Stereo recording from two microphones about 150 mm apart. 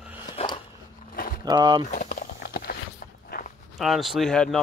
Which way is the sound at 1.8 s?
65° left (ahead or behind).